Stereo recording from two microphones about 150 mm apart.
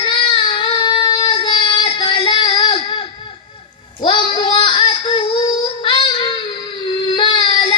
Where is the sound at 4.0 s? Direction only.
35° left (ahead or behind).